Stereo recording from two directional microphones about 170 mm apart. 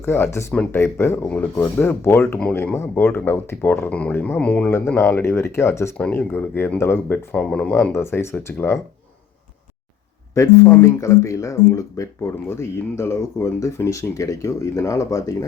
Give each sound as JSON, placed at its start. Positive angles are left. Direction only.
{"t": 0.0, "sound": "speech", "side_deg": 15}
{"t": 10.3, "sound": "speech", "side_deg": 15}